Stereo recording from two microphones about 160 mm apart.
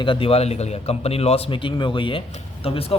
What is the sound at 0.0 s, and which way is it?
A man's voice, 30° left (ahead or behind).